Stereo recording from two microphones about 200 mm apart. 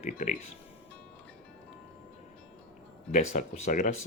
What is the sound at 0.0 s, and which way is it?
Speech, 35° left (ahead or behind).